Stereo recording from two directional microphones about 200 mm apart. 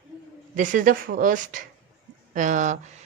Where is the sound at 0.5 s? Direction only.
40° right (ahead or behind).